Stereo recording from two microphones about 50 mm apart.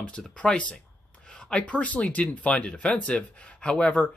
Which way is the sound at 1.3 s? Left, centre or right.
Centre.